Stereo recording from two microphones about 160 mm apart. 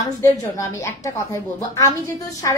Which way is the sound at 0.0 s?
20° left (ahead or behind).